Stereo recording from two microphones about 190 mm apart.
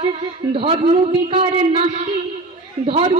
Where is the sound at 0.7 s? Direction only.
30° right (ahead or behind).